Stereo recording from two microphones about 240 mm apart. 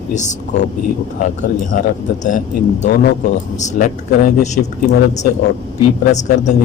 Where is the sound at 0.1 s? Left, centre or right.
Left.